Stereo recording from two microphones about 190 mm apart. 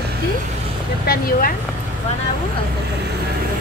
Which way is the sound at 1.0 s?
50° left (ahead or behind).